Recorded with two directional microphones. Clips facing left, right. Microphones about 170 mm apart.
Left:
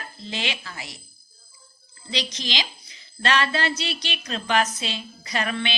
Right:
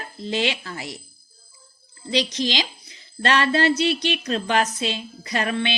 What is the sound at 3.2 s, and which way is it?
Music, 50° right (ahead or behind).